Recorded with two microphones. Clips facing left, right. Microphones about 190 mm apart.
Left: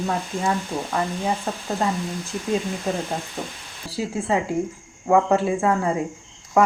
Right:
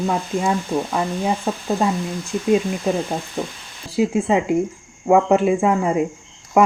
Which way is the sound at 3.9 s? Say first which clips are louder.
Right 6 dB; 20° right (ahead or behind).